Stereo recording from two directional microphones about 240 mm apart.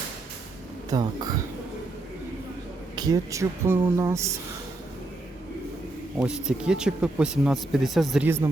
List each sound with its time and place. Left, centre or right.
0.9 s speech: centre
2.9 s speech: centre
6.1 s speech: centre